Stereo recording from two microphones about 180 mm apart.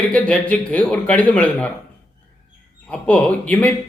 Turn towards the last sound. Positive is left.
turn(degrees=10)  # may be behind; listen again after turning